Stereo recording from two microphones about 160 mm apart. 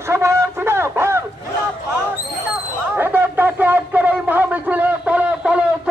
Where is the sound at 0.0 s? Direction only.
15° right (ahead or behind).